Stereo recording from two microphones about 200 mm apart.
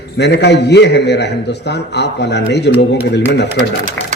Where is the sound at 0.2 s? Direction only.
60° left (ahead or behind).